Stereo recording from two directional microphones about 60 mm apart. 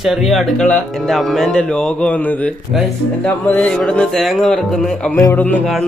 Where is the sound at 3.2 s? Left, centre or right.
Left.